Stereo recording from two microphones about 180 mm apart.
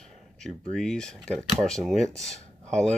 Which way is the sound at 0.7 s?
Centre (ahead or behind).